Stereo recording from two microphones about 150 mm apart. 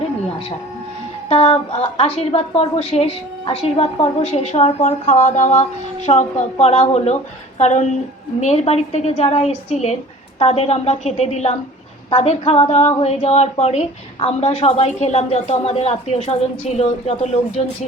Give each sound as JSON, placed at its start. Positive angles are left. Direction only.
{"t": 1.3, "sound": "a woman's voice", "side_deg": 40}